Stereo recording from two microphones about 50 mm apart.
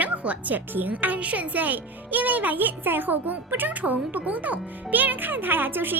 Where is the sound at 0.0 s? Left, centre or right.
Right.